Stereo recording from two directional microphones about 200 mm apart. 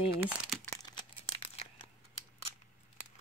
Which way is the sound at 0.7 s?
25° left (ahead or behind).